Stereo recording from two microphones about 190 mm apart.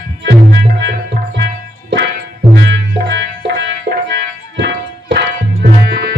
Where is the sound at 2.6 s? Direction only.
65° right (ahead or behind).